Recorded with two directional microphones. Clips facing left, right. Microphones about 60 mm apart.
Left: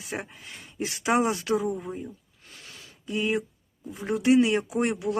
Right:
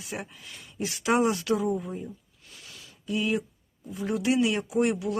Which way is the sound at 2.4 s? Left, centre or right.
Left.